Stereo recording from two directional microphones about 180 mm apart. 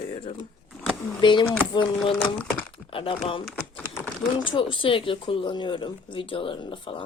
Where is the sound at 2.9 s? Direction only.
30° left (ahead or behind).